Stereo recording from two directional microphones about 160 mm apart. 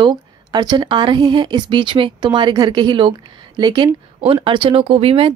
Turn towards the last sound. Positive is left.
turn(degrees=-35)  # may be behind; listen again after turning